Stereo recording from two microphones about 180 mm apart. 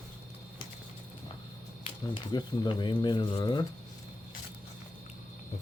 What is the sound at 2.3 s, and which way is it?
Speech, 25° left (ahead or behind).